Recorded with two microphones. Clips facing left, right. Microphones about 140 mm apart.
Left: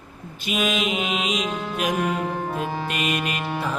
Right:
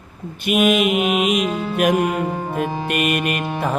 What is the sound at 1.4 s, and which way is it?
Music, 10° right (ahead or behind).